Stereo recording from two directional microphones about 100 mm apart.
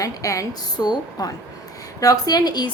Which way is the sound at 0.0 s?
35° left (ahead or behind).